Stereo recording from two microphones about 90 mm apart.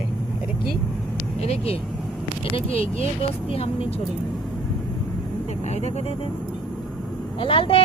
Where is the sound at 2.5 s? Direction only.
90° left.